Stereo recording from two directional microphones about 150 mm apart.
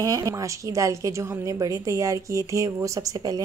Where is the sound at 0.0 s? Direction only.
25° right (ahead or behind).